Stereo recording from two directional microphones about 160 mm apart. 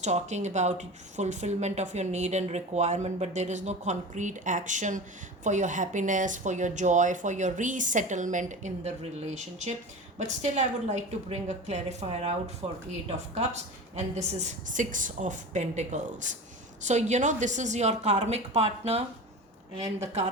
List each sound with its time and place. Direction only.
0.0 s speech: 45° right (ahead or behind)